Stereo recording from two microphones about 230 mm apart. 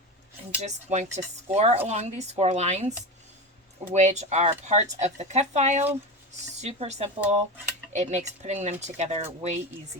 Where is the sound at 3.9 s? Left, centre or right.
Right.